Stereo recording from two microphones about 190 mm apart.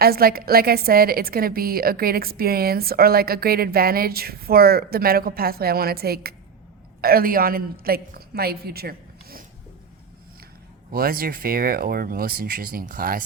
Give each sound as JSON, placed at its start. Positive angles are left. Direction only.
{"t": 0.0, "sound": "a woman's voice", "side_deg": -50}
{"t": 10.9, "sound": "a woman's voice", "side_deg": -50}